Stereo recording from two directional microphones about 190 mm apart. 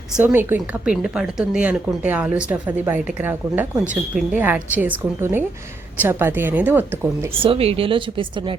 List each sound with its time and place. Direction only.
0.2 s a woman's voice: 10° right (ahead or behind)
7.4 s speech: 30° right (ahead or behind)